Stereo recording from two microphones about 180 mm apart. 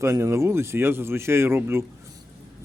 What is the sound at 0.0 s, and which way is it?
A man's voice, 15° right (ahead or behind).